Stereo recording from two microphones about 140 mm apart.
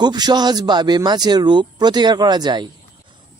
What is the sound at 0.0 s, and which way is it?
Speech, 30° right (ahead or behind).